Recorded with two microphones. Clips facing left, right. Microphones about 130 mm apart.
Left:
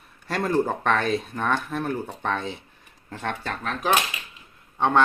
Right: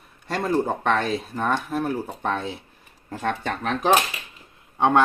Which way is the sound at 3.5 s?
30° right (ahead or behind).